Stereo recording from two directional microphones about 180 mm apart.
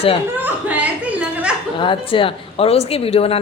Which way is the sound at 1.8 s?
30° left (ahead or behind).